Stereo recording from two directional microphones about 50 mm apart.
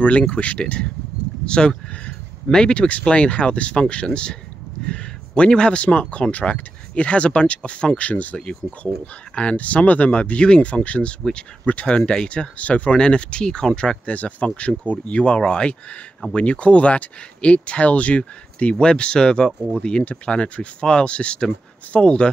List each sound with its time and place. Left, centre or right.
0.3 s speech: left
11.9 s speech: centre
12.3 s speech: left
14.0 s speech: left